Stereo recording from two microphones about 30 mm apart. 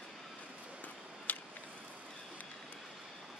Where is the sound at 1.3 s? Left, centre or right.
Left.